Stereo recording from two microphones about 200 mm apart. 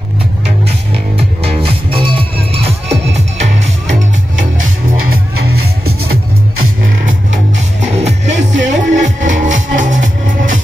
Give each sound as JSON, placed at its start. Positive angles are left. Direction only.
{"t": 1.1, "sound": "music", "side_deg": -30}
{"t": 7.8, "sound": "music", "side_deg": -35}